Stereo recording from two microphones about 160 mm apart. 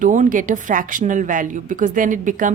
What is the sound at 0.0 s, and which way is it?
A woman's voice, 55° right (ahead or behind).